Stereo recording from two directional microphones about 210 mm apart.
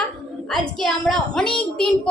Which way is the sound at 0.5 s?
5° left (ahead or behind).